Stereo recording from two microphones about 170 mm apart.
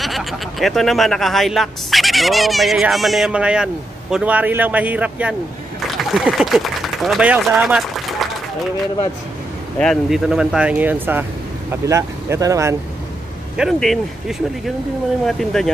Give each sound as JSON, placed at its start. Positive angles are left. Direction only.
{"t": 0.0, "sound": "speech", "side_deg": 0}
{"t": 9.8, "sound": "speech", "side_deg": 0}
{"t": 13.6, "sound": "speech", "side_deg": 0}